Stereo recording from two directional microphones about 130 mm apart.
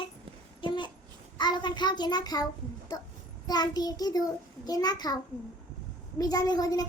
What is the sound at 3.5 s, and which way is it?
A child's voice, 30° left (ahead or behind).